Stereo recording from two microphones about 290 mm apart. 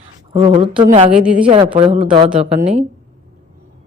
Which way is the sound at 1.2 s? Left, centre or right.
Centre.